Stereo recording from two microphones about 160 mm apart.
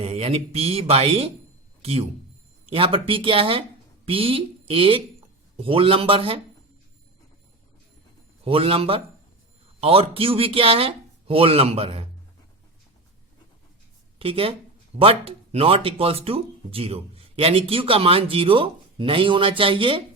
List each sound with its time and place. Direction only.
0.0 s speech: 40° right (ahead or behind)
8.4 s speech: 35° right (ahead or behind)
14.2 s speech: 35° right (ahead or behind)